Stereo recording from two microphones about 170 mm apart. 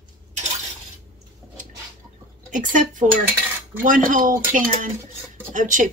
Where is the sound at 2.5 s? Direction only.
50° right (ahead or behind).